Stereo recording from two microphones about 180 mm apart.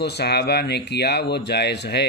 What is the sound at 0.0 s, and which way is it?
Speech, 65° left (ahead or behind).